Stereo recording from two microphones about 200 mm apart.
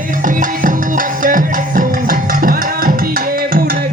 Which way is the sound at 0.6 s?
45° right (ahead or behind).